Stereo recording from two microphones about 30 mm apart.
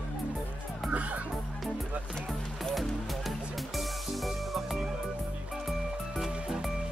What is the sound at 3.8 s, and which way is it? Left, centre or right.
Music, centre.